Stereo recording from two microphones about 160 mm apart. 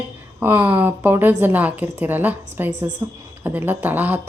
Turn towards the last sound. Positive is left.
turn(degrees=-10)  # may be behind; listen again after turning